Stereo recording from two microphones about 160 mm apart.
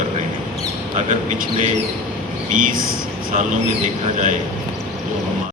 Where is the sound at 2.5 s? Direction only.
55° right (ahead or behind).